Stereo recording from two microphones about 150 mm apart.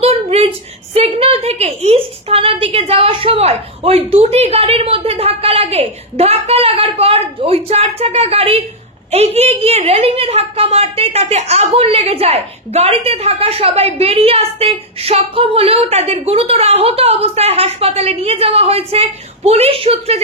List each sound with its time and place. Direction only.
0.0 s a woman's voice: 45° right (ahead or behind)